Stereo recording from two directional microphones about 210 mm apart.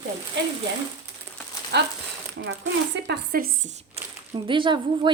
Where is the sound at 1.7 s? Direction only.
55° right (ahead or behind).